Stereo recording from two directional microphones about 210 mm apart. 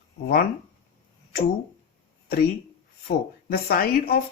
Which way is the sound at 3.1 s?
45° left (ahead or behind).